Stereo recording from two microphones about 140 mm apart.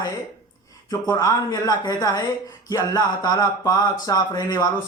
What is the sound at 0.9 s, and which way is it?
Speech, 25° left (ahead or behind).